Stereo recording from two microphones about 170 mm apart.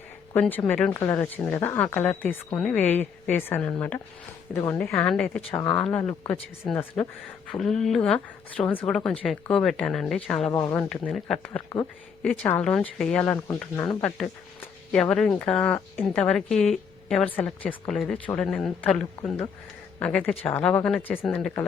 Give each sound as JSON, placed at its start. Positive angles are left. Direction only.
{"t": 0.3, "sound": "speech", "side_deg": 10}
{"t": 5.0, "sound": "speech", "side_deg": 5}
{"t": 10.5, "sound": "speech", "side_deg": 20}
{"t": 10.8, "sound": "speech", "side_deg": 0}
{"t": 15.1, "sound": "speech", "side_deg": 5}